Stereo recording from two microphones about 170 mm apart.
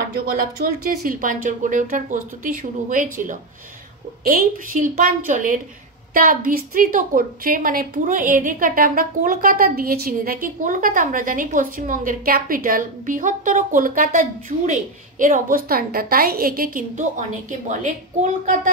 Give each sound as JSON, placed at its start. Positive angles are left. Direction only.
{"t": 0.4, "sound": "a woman's voice", "side_deg": -60}